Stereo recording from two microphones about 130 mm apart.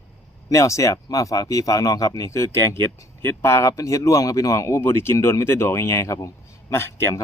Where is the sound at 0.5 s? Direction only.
25° left (ahead or behind).